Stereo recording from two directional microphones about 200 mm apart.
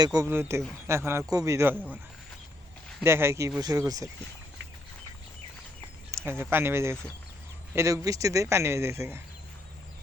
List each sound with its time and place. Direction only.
0.0 s speech: 20° right (ahead or behind)
3.0 s speech: 10° right (ahead or behind)
6.1 s speech: 15° right (ahead or behind)